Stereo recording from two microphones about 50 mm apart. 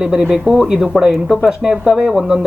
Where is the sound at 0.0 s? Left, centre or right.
Centre.